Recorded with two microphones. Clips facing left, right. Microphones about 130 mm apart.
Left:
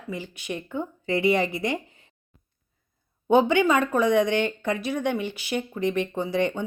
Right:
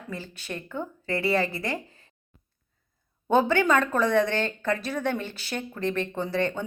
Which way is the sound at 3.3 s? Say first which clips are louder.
Left 2 dB; 15° left (ahead or behind).